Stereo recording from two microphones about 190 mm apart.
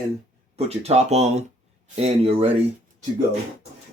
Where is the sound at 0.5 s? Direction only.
35° right (ahead or behind).